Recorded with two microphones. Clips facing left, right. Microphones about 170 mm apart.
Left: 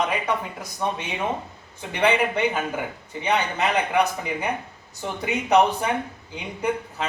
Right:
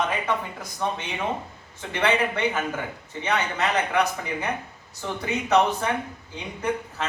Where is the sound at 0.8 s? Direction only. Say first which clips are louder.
Left 1 dB; 15° left (ahead or behind).